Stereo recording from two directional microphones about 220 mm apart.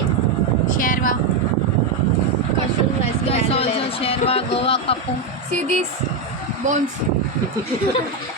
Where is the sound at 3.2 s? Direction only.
25° left (ahead or behind).